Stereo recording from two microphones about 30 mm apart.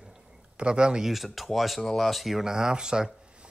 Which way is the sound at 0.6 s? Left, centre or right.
Right.